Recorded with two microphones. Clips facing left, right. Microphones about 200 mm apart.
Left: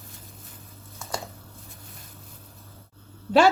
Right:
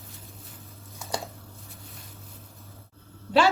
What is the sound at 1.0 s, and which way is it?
Typing, 10° right (ahead or behind).